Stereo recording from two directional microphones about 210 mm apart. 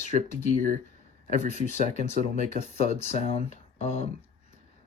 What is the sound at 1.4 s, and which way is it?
Speech, 35° left (ahead or behind).